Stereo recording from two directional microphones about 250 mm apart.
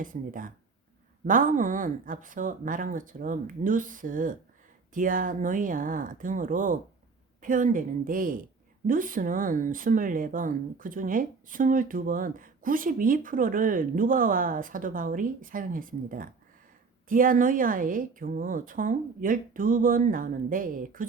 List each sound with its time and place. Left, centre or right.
0.0 s speech: right